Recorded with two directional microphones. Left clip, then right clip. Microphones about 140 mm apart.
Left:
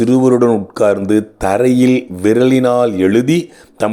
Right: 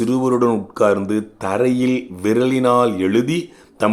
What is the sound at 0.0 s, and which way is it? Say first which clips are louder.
Speech: left 6 dB; 25° left (ahead or behind).